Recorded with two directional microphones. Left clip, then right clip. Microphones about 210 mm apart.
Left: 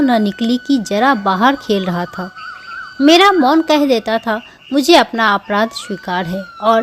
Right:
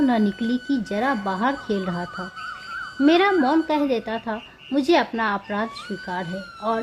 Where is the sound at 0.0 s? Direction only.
20° left (ahead or behind).